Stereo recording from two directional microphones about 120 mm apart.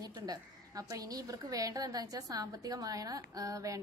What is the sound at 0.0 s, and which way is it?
A woman's voice, 30° right (ahead or behind).